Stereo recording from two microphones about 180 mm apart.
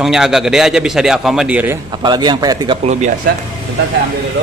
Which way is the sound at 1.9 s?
25° right (ahead or behind).